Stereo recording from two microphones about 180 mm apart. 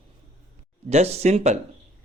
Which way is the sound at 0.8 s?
35° right (ahead or behind).